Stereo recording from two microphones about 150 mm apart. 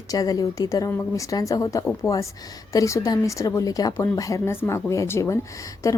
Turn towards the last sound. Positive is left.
turn(degrees=20)  # may be behind; listen again after turning